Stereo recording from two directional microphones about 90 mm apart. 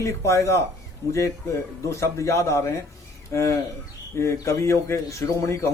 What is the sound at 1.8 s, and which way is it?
A man's voice, 35° left (ahead or behind).